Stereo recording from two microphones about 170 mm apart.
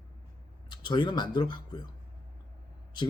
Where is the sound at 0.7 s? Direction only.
25° left (ahead or behind).